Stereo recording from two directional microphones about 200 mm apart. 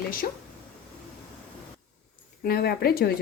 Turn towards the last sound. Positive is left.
turn(degrees=50)  # may be behind; listen again after turning